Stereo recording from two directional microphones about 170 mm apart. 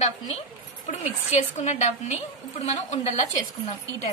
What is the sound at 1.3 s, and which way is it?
A woman's voice, 40° left (ahead or behind).